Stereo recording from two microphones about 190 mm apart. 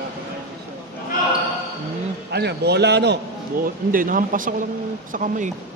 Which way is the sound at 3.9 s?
45° right (ahead or behind).